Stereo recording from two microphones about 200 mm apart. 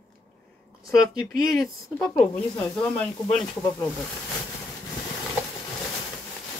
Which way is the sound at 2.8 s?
5° left (ahead or behind).